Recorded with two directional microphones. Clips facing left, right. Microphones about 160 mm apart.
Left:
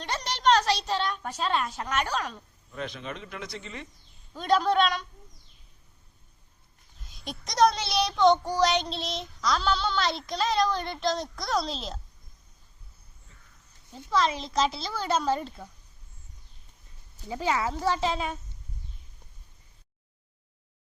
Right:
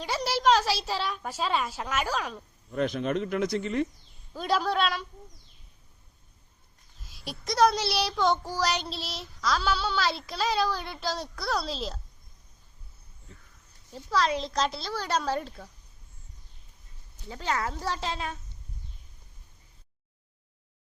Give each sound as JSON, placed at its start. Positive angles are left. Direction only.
{"t": 0.0, "sound": "a woman's voice", "side_deg": -5}
{"t": 2.7, "sound": "speech", "side_deg": -50}
{"t": 4.4, "sound": "child singing", "side_deg": -5}
{"t": 7.0, "sound": "child singing", "side_deg": 0}
{"t": 14.1, "sound": "child singing", "side_deg": 0}
{"t": 17.2, "sound": "child singing", "side_deg": 10}